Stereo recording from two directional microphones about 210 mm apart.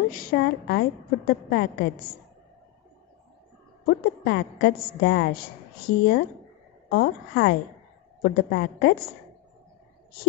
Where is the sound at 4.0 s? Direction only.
50° left (ahead or behind).